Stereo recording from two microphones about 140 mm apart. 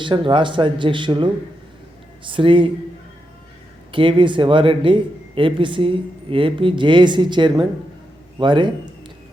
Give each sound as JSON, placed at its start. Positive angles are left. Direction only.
{"t": 0.0, "sound": "speech", "side_deg": -35}
{"t": 2.3, "sound": "speech", "side_deg": -35}
{"t": 3.9, "sound": "speech", "side_deg": -35}